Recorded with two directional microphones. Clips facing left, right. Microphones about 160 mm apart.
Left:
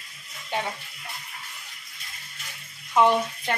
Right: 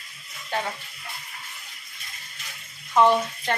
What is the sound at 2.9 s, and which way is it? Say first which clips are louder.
Speech: right 1 dB; 10° left (ahead or behind).